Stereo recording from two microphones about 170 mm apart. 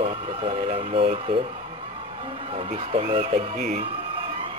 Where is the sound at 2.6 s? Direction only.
35° right (ahead or behind).